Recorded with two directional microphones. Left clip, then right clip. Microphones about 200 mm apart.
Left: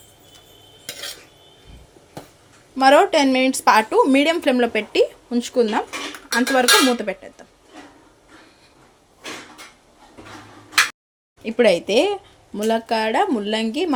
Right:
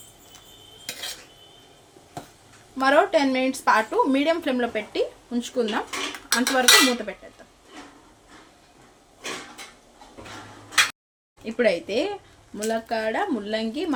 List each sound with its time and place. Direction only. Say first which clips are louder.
2.7 s speech: left 5 dB; 35° left (ahead or behind)
11.4 s speech: left 6 dB; 30° left (ahead or behind)